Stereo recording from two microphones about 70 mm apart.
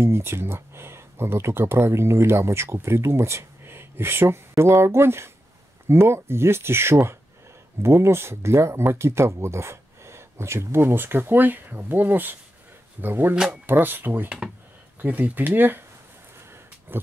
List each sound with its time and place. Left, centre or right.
0.0 s speech: right
13.3 s speech: centre
13.7 s speech: right
16.9 s dog: right